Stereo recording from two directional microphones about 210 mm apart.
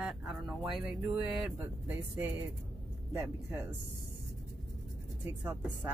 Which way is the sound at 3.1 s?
15° right (ahead or behind).